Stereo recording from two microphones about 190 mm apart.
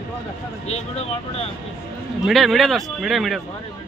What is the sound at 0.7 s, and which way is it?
Speech, 35° left (ahead or behind).